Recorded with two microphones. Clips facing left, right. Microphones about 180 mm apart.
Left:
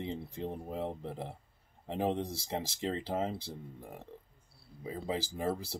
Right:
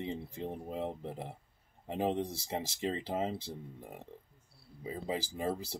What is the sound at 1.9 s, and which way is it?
Speech, 15° right (ahead or behind).